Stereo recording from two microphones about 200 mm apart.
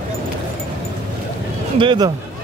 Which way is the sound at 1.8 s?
25° right (ahead or behind).